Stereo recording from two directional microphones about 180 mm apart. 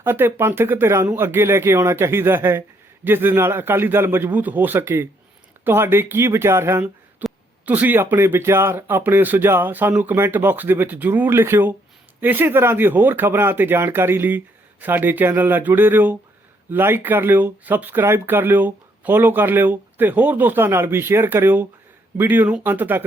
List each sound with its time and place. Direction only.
0.0 s speech: 15° right (ahead or behind)